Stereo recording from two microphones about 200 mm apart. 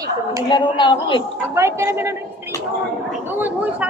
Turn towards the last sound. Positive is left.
turn(degrees=-10)  # may be behind; listen again after turning